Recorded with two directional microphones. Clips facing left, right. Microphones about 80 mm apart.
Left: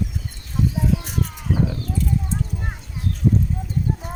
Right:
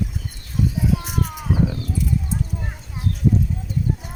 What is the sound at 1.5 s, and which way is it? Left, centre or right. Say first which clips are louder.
Wild animals: right 1 dB; centre.